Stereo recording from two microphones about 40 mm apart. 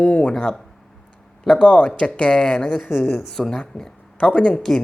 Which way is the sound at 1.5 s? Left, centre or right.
Left.